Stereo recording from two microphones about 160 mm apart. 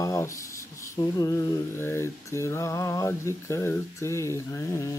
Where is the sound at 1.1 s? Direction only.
20° left (ahead or behind).